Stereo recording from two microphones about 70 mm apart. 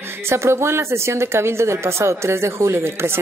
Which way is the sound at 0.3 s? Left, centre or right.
Right.